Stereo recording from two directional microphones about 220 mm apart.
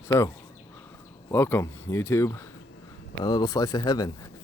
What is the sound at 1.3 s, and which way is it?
Speech, 10° left (ahead or behind).